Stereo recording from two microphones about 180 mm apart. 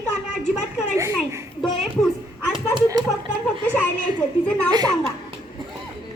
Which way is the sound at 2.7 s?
20° right (ahead or behind).